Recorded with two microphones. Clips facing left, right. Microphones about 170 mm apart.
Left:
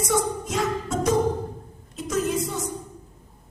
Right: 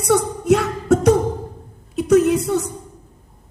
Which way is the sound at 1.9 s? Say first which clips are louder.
Right 11 dB; 65° right (ahead or behind).